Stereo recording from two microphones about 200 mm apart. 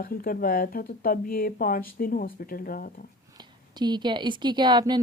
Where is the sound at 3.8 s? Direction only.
20° right (ahead or behind).